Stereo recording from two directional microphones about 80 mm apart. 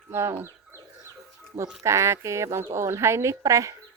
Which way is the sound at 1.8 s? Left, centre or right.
Right.